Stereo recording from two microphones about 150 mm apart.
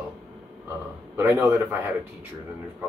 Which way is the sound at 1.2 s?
15° right (ahead or behind).